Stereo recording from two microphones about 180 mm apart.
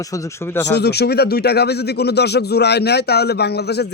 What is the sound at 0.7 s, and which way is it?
Speech, 65° left (ahead or behind).